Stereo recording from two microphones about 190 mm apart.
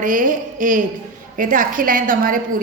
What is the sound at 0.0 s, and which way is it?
A woman's voice, 45° right (ahead or behind).